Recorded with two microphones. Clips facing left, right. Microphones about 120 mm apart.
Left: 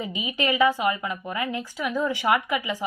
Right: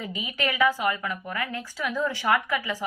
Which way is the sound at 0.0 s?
20° left (ahead or behind).